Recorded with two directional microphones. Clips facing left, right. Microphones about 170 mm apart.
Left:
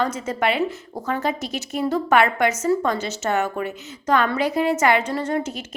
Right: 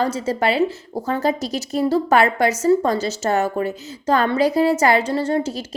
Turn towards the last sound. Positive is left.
turn(degrees=-30)  # may be behind; listen again after turning